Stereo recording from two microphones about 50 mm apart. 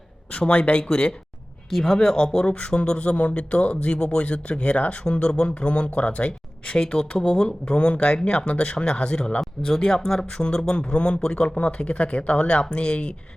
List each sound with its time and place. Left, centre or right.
0.3 s speech: left
1.7 s speech: centre